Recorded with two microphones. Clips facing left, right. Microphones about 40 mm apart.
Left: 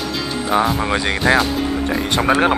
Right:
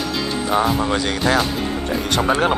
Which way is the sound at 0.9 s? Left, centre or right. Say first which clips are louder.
Left 2 dB; centre.